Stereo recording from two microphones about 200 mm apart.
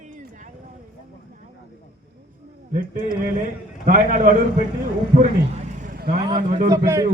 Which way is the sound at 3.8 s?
45° right (ahead or behind).